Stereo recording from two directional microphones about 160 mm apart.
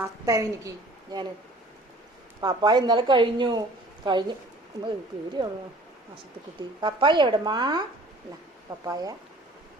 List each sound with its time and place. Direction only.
0.0 s a woman's voice: 20° right (ahead or behind)
2.4 s a woman's voice: 25° right (ahead or behind)
5.4 s a woman's voice: 25° right (ahead or behind)
6.8 s a woman's voice: 30° right (ahead or behind)